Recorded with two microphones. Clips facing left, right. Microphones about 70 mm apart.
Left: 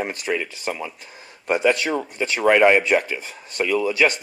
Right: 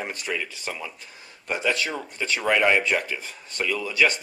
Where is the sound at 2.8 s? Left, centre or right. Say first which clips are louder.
Left 5 dB; centre.